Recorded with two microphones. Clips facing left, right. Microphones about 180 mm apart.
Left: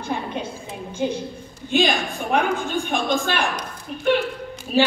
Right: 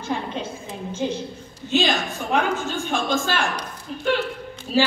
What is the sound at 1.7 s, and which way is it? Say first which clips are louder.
A woman's voice: left 1 dB; 15° left (ahead or behind).